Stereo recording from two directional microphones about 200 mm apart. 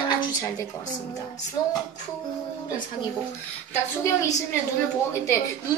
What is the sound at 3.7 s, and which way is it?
A woman's voice, 15° left (ahead or behind).